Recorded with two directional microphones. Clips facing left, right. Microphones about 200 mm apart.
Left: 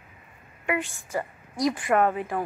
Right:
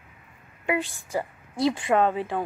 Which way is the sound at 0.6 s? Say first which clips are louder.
Right 2 dB; 30° right (ahead or behind).